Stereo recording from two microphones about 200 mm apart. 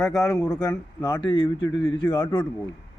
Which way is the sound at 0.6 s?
20° left (ahead or behind).